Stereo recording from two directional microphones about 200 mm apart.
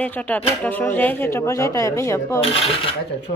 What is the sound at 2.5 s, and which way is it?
Speech, 30° left (ahead or behind).